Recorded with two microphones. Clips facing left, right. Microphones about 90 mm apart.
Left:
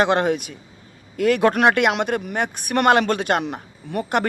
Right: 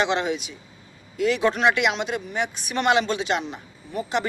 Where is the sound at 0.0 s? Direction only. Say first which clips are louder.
Left 5 dB; 50° left (ahead or behind).